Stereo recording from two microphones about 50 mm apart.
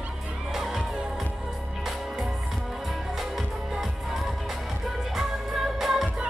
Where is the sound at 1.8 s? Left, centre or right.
Centre.